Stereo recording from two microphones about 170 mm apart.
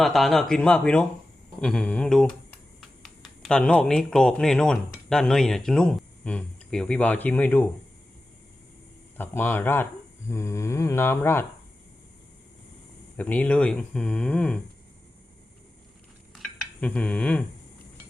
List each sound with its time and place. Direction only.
0.0 s speech: centre (ahead or behind)
9.1 s speech: 10° left (ahead or behind)
13.1 s speech: 10° left (ahead or behind)
16.3 s cutlery: 5° left (ahead or behind)